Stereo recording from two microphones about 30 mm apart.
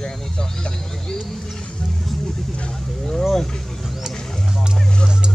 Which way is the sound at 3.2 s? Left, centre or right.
Centre.